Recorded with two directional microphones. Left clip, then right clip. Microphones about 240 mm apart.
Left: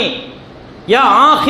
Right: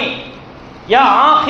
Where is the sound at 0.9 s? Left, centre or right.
Left.